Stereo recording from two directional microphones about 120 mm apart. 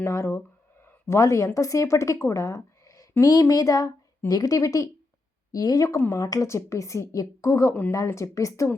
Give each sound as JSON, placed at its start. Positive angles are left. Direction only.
{"t": 0.0, "sound": "a woman's voice", "side_deg": 20}
{"t": 0.9, "sound": "a sound", "side_deg": 25}
{"t": 1.5, "sound": "a woman's voice", "side_deg": 25}